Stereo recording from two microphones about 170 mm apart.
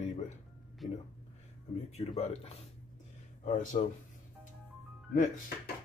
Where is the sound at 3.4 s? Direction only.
50° left (ahead or behind).